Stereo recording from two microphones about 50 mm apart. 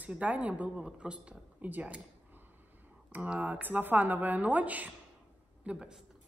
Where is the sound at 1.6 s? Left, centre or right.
Right.